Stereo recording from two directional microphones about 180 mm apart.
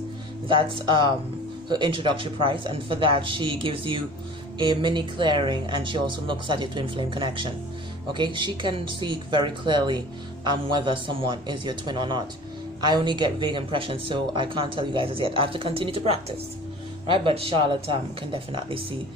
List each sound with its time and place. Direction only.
0.5 s speech: 30° right (ahead or behind)